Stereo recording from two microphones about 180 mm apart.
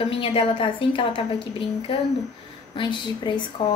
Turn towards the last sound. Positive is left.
turn(degrees=25)  # may be behind; listen again after turning